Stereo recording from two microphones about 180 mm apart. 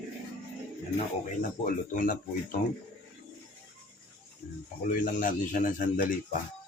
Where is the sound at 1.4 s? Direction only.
45° left (ahead or behind).